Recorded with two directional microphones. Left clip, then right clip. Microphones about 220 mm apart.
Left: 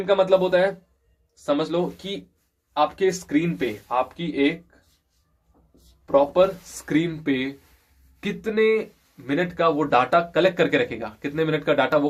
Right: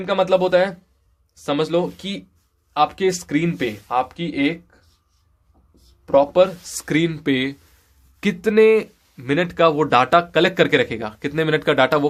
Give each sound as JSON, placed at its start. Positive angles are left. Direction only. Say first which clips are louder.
{"t": 0.0, "sound": "speech", "louder": "right 1 dB", "side_deg": -50}
{"t": 6.1, "sound": "speech", "louder": "right 3 dB", "side_deg": -50}